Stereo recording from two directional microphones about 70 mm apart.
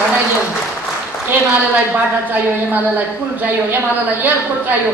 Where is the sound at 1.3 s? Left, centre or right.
Right.